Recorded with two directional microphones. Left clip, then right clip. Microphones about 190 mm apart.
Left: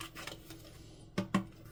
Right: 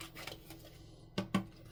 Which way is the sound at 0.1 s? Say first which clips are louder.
Left 2 dB; 10° left (ahead or behind).